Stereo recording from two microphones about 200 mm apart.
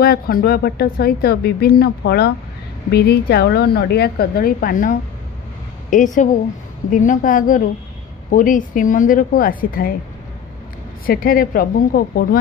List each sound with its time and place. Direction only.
0.0 s a woman's voice: 50° left (ahead or behind)
11.1 s speech: 45° left (ahead or behind)